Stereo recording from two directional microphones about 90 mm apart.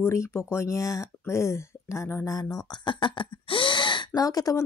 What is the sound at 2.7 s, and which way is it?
Speech, 60° left (ahead or behind).